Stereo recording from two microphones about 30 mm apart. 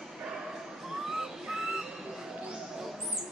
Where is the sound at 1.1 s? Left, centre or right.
Centre.